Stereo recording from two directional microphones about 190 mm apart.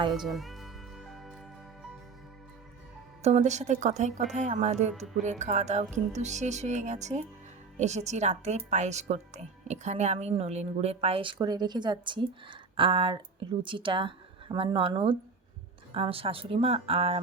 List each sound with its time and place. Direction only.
0.1 s music: centre (ahead or behind)
3.2 s speech: 35° right (ahead or behind)